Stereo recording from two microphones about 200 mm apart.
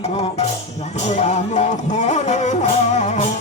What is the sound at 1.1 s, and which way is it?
Speech, 35° left (ahead or behind).